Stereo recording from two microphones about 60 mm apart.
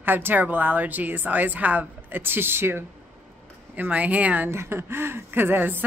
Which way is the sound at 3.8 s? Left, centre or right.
Right.